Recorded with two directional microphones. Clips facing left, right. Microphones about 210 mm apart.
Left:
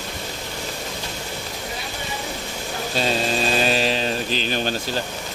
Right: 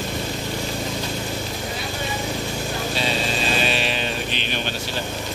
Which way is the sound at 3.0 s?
40° left (ahead or behind).